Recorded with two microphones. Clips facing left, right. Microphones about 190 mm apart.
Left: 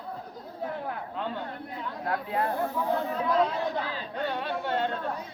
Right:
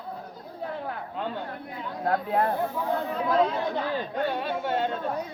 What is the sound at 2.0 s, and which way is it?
Speech, 45° right (ahead or behind).